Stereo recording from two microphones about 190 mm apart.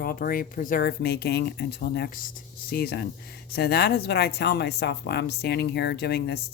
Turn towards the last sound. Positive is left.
turn(degrees=60)  # may be behind; listen again after turning